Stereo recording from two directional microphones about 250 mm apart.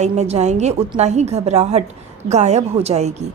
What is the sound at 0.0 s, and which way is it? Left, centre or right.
A woman's voice, right.